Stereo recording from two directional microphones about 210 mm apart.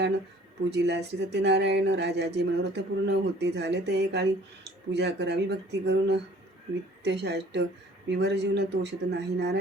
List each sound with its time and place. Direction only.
0.7 s speech: 55° right (ahead or behind)